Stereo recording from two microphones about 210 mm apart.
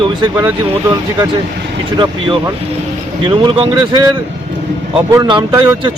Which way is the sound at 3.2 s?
25° right (ahead or behind).